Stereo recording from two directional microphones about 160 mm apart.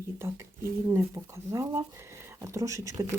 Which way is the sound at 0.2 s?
15° right (ahead or behind).